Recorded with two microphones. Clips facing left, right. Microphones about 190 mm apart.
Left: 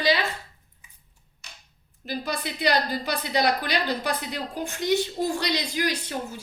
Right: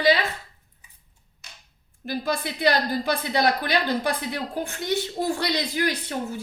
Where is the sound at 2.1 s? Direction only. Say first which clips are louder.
Right 3 dB; 50° right (ahead or behind).